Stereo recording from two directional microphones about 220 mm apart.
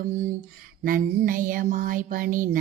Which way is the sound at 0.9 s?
40° right (ahead or behind).